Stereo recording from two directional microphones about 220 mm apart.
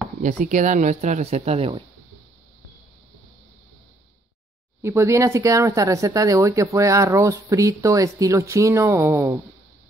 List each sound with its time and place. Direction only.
0.2 s speech: 35° right (ahead or behind)
4.8 s speech: 10° right (ahead or behind)